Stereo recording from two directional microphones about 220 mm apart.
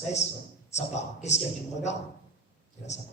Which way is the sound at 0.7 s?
30° left (ahead or behind).